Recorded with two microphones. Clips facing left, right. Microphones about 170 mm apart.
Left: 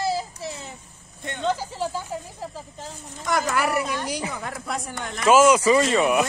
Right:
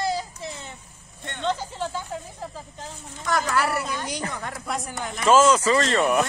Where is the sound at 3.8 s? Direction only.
Centre (ahead or behind).